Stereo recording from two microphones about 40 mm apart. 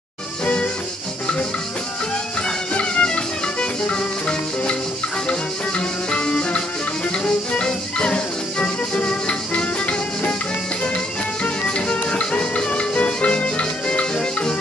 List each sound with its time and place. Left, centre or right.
2.7 s music: left
11.4 s music: left